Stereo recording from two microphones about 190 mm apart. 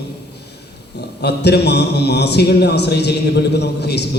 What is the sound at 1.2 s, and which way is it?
A man's voice, 60° left (ahead or behind).